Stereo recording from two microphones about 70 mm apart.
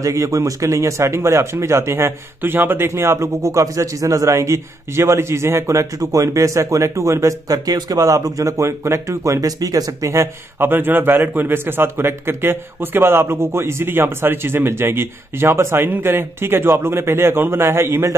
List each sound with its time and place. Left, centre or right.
0.0 s speech: right
10.6 s speech: right